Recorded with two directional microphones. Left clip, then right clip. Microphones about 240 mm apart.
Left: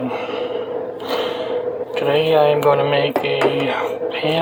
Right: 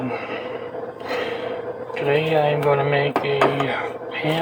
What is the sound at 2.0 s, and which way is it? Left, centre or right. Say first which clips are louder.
Music: left 4 dB; left.